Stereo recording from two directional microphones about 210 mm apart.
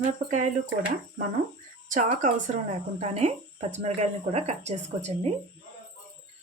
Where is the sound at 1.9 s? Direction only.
35° right (ahead or behind).